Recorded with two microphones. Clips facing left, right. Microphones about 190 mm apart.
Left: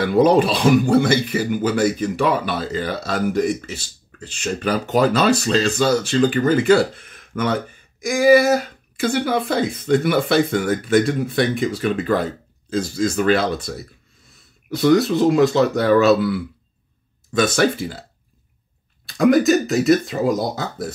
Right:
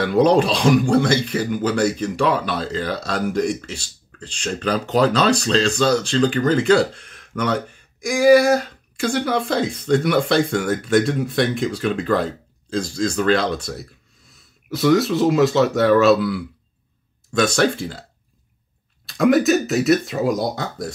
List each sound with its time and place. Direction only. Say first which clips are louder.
0.0 s speech: left 1 dB; 5° left (ahead or behind)
19.0 s speech: left 1 dB; centre (ahead or behind)